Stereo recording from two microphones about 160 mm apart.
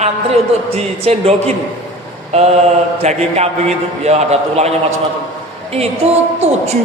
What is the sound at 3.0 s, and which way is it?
A man's voice, 40° right (ahead or behind).